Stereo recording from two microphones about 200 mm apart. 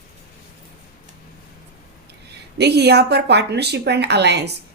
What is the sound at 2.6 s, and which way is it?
A woman's voice, 55° right (ahead or behind).